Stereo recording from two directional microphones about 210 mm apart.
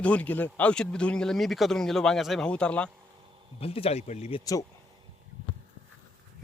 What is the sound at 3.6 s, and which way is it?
Speech, 25° left (ahead or behind).